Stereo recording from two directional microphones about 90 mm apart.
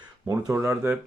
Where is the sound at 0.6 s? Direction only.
30° right (ahead or behind).